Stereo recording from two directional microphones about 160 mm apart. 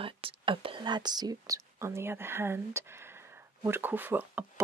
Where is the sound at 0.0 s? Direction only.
35° right (ahead or behind).